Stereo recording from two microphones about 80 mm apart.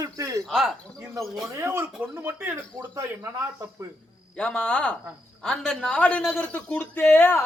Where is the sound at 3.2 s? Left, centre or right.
Right.